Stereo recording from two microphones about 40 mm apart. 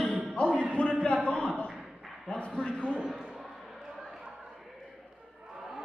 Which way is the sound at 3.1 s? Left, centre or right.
Centre.